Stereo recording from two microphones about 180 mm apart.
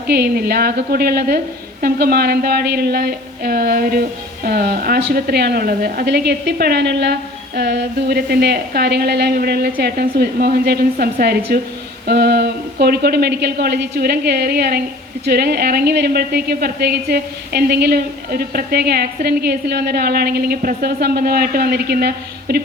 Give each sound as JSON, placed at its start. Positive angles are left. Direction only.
{"t": 0.1, "sound": "a woman's voice", "side_deg": -60}